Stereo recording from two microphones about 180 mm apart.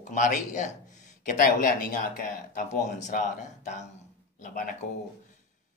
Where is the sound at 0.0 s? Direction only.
45° left (ahead or behind).